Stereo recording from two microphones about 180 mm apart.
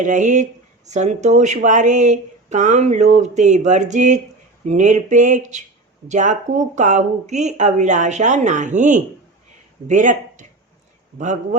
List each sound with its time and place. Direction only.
0.0 s speech: 45° right (ahead or behind)